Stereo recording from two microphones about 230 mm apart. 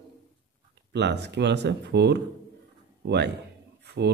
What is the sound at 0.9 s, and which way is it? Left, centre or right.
Speech, right.